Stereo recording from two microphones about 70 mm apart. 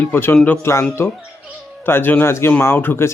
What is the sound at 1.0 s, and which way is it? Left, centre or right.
Speech, left.